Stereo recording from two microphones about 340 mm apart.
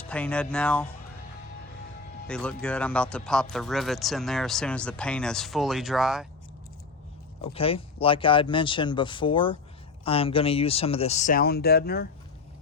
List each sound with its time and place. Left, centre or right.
0.1 s speech: centre
2.2 s speech: centre
7.4 s speech: centre